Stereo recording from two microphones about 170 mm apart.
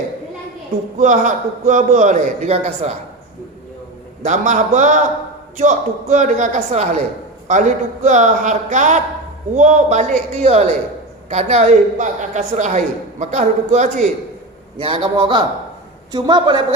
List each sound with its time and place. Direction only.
0.9 s a man's voice: 50° right (ahead or behind)
4.2 s a man's voice: 45° right (ahead or behind)
8.0 s a man's voice: 45° right (ahead or behind)
14.8 s a man's voice: 30° right (ahead or behind)